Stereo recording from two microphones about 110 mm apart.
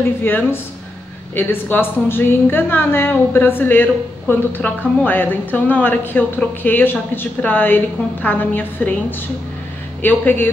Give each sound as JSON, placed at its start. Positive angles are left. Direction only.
{"t": 0.2, "sound": "a woman's voice", "side_deg": 20}
{"t": 10.0, "sound": "a woman's voice", "side_deg": 15}